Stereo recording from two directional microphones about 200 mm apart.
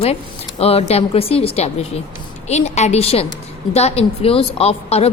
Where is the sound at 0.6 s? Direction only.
30° left (ahead or behind).